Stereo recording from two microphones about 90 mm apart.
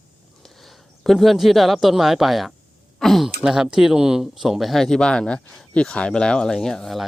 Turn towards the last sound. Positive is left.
turn(degrees=5)  # may be behind; listen again after turning